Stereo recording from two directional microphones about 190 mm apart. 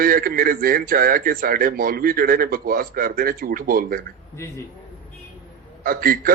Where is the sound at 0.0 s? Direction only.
50° right (ahead or behind).